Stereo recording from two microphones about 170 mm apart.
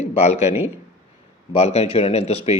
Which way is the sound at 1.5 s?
40° left (ahead or behind).